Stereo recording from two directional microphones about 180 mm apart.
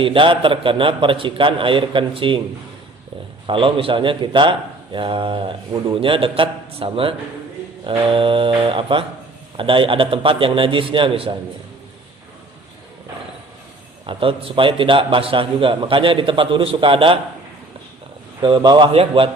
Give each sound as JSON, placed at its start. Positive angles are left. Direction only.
{"t": 0.0, "sound": "a man's voice", "side_deg": -30}
{"t": 3.4, "sound": "a man's voice", "side_deg": -30}
{"t": 14.1, "sound": "a man's voice", "side_deg": -30}
{"t": 18.4, "sound": "a man's voice", "side_deg": -25}